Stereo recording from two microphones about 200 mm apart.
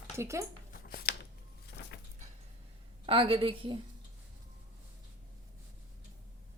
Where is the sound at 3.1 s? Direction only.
25° right (ahead or behind).